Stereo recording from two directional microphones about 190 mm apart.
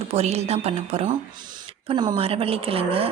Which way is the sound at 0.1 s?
35° right (ahead or behind).